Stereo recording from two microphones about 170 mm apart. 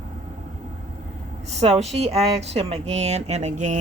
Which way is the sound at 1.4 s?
40° right (ahead or behind).